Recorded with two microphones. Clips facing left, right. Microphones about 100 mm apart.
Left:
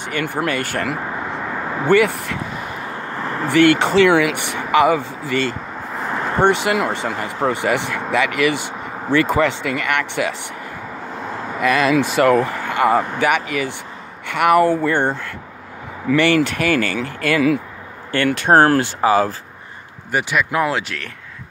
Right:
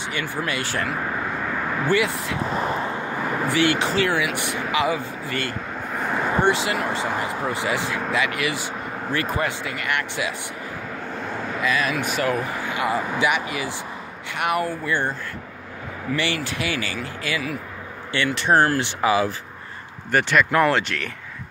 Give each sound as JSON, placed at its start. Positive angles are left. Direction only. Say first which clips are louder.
{"t": 0.0, "sound": "speech", "louder": "left 5 dB", "side_deg": 55}
{"t": 2.5, "sound": "vehicle", "louder": "right 5 dB", "side_deg": -30}
{"t": 3.1, "sound": "a sound", "louder": "left 1 dB", "side_deg": -10}
{"t": 3.4, "sound": "speech", "louder": "left 8 dB", "side_deg": 60}
{"t": 3.8, "sound": "speech", "louder": "left 8 dB", "side_deg": 80}
{"t": 5.9, "sound": "vehicle", "louder": "left 1 dB", "side_deg": 0}
{"t": 6.4, "sound": "speech", "louder": "left 8 dB", "side_deg": 65}
{"t": 11.6, "sound": "speech", "louder": "left 8 dB", "side_deg": 80}
{"t": 14.2, "sound": "speech", "louder": "left 10 dB", "side_deg": 70}
{"t": 14.9, "sound": "speech", "louder": "left 6 dB", "side_deg": 65}
{"t": 18.9, "sound": "speech", "louder": "left 4 dB", "side_deg": 40}
{"t": 20.1, "sound": "speech", "louder": "right 1 dB", "side_deg": 10}